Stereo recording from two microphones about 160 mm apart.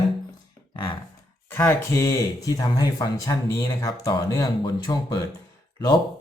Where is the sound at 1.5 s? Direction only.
15° left (ahead or behind).